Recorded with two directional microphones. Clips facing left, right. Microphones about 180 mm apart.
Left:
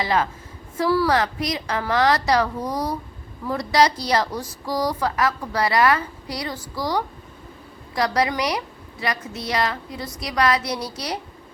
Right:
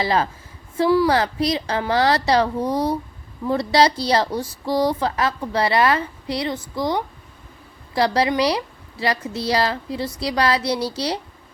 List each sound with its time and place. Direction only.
0.0 s a woman's voice: 30° right (ahead or behind)